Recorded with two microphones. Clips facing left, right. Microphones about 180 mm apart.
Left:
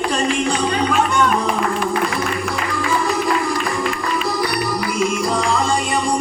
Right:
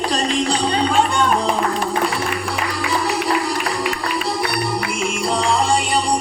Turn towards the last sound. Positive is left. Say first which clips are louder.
# right 1 dB
turn(degrees=-35)  # may be behind; listen again after turning